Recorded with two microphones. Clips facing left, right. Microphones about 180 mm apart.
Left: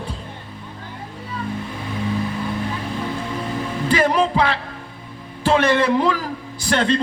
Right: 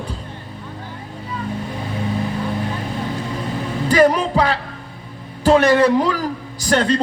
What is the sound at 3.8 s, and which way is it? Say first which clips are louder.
A man's voice: right 4 dB; 40° right (ahead or behind).